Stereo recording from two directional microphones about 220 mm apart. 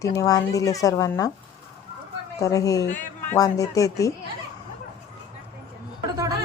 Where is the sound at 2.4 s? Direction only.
15° left (ahead or behind).